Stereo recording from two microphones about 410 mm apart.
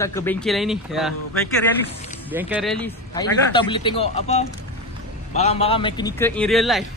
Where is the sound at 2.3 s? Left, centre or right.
Centre.